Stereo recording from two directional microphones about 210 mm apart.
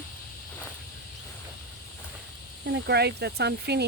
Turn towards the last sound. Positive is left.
turn(degrees=-50)  # may be behind; listen again after turning